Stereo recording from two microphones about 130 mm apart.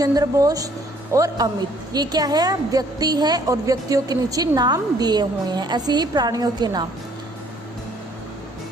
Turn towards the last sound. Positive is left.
turn(degrees=-30)  # may be behind; listen again after turning